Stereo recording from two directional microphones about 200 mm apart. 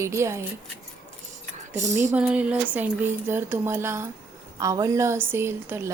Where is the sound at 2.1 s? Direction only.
5° right (ahead or behind).